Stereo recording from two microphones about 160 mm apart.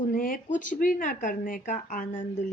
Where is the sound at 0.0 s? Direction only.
55° left (ahead or behind).